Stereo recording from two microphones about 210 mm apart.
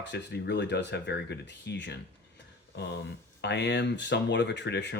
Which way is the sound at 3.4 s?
55° left (ahead or behind).